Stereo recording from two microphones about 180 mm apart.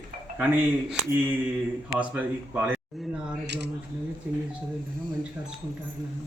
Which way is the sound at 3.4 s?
70° right (ahead or behind).